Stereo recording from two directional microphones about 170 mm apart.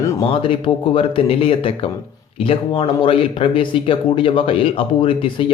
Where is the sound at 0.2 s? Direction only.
30° left (ahead or behind).